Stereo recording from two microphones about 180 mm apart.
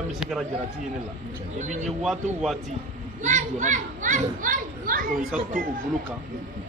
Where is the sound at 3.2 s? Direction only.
40° right (ahead or behind).